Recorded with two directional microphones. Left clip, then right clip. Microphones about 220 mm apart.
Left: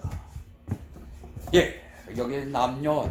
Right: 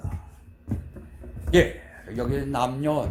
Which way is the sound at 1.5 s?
25° right (ahead or behind).